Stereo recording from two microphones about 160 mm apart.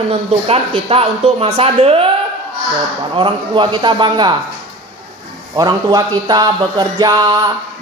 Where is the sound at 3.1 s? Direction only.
30° right (ahead or behind).